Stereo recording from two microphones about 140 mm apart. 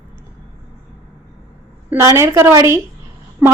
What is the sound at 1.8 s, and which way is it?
A woman's voice, 20° right (ahead or behind).